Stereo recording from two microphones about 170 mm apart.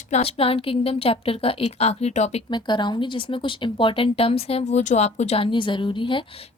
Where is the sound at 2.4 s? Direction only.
25° left (ahead or behind).